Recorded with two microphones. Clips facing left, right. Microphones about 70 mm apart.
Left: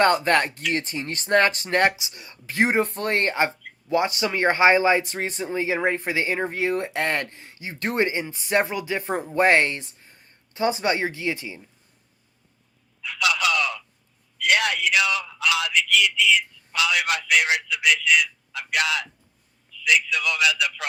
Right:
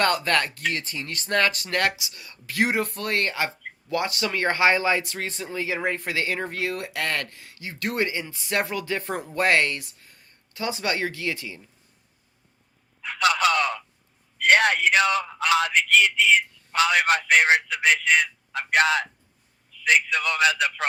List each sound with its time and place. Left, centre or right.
0.0 s speech: left
13.0 s a sound: right
14.3 s speech: right